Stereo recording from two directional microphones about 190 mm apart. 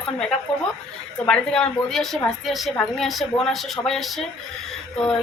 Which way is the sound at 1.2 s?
5° left (ahead or behind).